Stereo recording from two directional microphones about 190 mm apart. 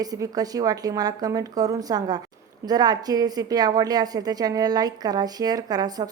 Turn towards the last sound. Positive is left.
turn(degrees=-20)  # may be behind; listen again after turning